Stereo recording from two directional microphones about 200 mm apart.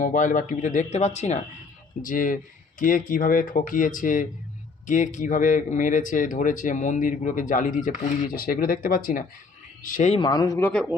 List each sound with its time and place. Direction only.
0.0 s speech: 40° left (ahead or behind)
10.2 s speech: 20° left (ahead or behind)